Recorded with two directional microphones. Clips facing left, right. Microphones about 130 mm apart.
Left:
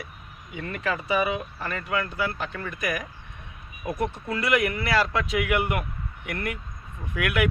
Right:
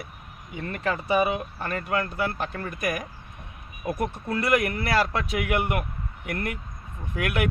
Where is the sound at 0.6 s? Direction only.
35° right (ahead or behind).